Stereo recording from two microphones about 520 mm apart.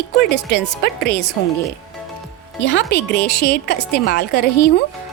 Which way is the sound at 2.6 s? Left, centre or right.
Centre.